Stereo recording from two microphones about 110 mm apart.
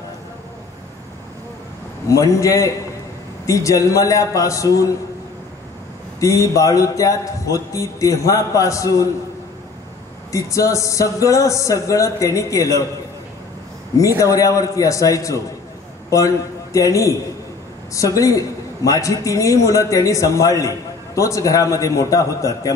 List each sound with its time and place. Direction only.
2.0 s a man's voice: 30° left (ahead or behind)
6.1 s a man's voice: 30° left (ahead or behind)
10.3 s a man's voice: 30° left (ahead or behind)
13.9 s a man's voice: 30° left (ahead or behind)